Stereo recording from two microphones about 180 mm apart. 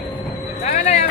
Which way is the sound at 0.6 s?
40° left (ahead or behind).